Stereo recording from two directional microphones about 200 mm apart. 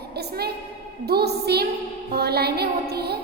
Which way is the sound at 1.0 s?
55° right (ahead or behind).